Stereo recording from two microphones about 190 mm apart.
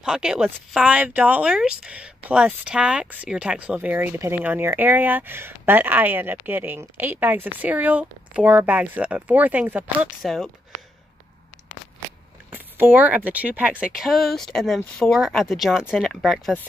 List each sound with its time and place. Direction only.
0.0 s speech: 5° right (ahead or behind)
12.4 s speech: 10° right (ahead or behind)